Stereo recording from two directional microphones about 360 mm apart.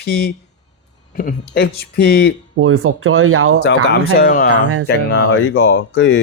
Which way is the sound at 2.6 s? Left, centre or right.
Right.